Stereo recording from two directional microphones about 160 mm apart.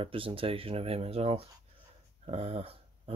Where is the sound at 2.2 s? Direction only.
40° right (ahead or behind).